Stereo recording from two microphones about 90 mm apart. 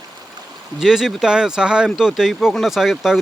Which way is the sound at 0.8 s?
5° right (ahead or behind).